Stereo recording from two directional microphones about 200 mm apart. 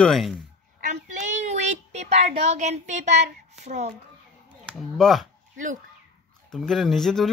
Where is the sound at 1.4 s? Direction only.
35° right (ahead or behind).